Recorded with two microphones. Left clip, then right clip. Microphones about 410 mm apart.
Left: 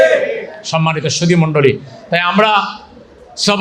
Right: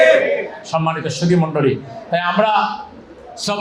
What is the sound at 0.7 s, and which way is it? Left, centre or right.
A man's voice, left.